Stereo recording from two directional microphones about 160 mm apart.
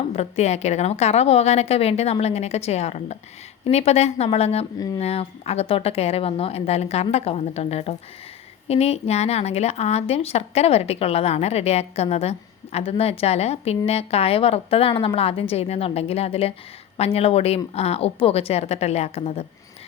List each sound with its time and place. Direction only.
0.1 s speech: 40° left (ahead or behind)